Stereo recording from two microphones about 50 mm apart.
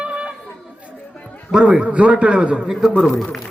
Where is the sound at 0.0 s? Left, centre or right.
Centre.